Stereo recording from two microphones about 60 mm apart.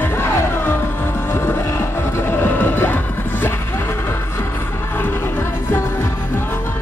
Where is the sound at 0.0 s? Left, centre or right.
Left.